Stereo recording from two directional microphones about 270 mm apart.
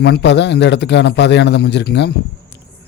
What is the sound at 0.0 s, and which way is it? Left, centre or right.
A man's voice, left.